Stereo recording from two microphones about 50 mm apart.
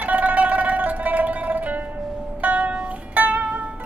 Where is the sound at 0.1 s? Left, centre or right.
Right.